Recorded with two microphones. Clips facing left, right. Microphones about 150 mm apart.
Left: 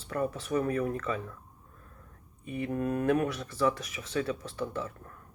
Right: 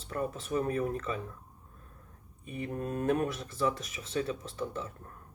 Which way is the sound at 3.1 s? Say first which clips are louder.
Left 2 dB; 25° right (ahead or behind).